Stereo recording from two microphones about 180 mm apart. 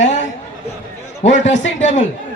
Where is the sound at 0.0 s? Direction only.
40° left (ahead or behind).